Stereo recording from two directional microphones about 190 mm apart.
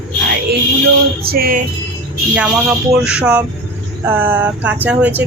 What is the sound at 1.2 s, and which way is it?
Music, 50° right (ahead or behind).